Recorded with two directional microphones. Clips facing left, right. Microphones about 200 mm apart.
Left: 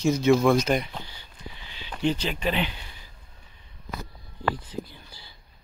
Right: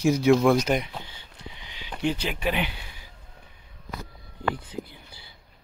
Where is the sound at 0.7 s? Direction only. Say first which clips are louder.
Even; 10° right (ahead or behind).